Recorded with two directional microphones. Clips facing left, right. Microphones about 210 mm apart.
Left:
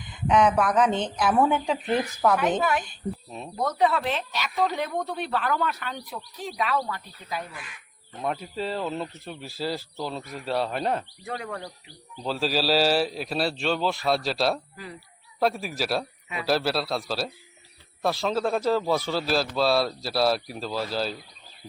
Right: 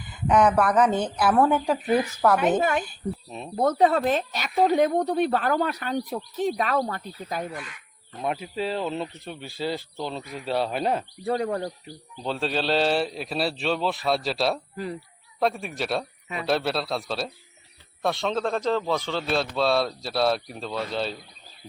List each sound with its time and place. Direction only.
0.1 s a man's voice: 5° right (ahead or behind)
2.6 s a woman's voice: 25° right (ahead or behind)
2.8 s a man's voice: centre (ahead or behind)
3.5 s speech: 40° right (ahead or behind)
8.2 s a man's voice: 5° right (ahead or behind)
11.2 s speech: 35° right (ahead or behind)
12.1 s a man's voice: centre (ahead or behind)